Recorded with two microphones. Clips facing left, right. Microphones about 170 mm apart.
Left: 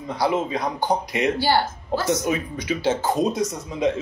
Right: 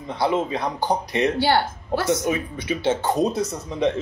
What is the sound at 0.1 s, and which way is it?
Speech, 25° right (ahead or behind).